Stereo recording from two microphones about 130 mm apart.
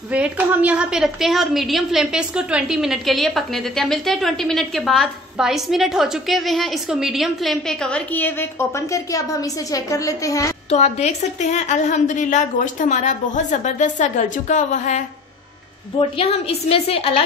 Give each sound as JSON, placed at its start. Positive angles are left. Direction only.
{"t": 0.1, "sound": "a woman's voice", "side_deg": -10}
{"t": 10.7, "sound": "a woman's voice", "side_deg": 60}
{"t": 16.0, "sound": "a woman's voice", "side_deg": 45}